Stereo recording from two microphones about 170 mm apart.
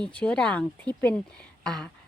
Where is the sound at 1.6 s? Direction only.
5° left (ahead or behind).